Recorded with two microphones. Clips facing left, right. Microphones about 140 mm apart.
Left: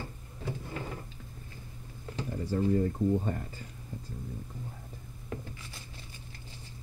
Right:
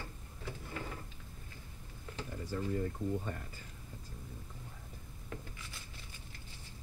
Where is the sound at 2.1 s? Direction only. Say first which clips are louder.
Left 8 dB; 35° left (ahead or behind).